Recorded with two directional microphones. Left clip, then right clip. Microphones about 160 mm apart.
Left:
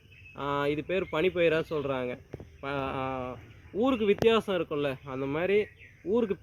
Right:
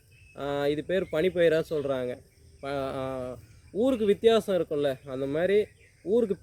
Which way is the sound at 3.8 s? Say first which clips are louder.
Right 2 dB; 15° right (ahead or behind).